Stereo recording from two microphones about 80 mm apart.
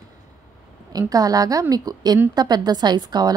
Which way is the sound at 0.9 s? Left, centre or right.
Right.